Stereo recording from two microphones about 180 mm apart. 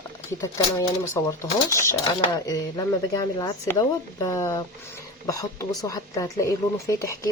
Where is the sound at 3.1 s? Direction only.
20° left (ahead or behind).